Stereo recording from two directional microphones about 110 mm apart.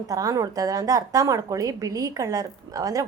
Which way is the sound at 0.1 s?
35° right (ahead or behind).